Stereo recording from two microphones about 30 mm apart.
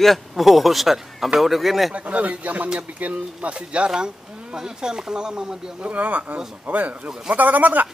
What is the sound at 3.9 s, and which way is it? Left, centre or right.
Speech, right.